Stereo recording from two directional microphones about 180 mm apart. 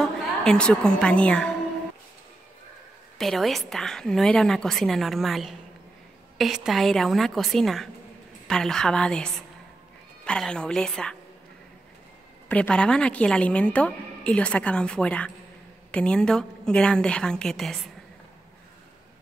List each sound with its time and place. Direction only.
0.0 s a woman's voice: 5° left (ahead or behind)
3.2 s a woman's voice: centre (ahead or behind)
12.4 s a woman's voice: 5° left (ahead or behind)